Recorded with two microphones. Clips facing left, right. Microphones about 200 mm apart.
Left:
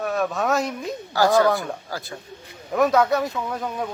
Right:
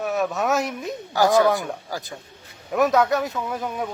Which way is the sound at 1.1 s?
15° right (ahead or behind).